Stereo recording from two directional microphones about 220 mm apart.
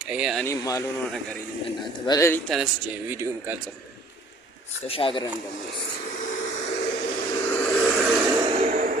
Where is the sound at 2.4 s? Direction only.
Centre (ahead or behind).